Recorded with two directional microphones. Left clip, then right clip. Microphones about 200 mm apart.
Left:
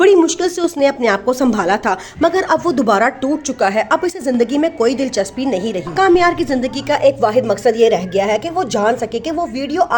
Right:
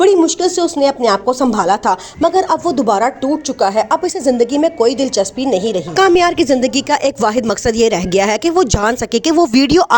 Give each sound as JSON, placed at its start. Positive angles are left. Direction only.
{"t": 0.0, "sound": "speech", "side_deg": 0}
{"t": 6.0, "sound": "a woman's voice", "side_deg": -40}
{"t": 7.0, "sound": "speech", "side_deg": -50}